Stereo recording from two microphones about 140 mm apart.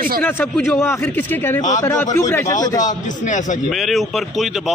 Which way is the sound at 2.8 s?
65° left (ahead or behind).